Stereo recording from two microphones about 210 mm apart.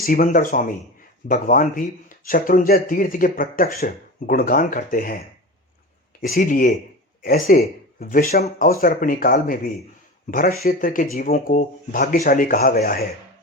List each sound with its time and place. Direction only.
0.0 s speech: 40° left (ahead or behind)
6.2 s speech: 45° left (ahead or behind)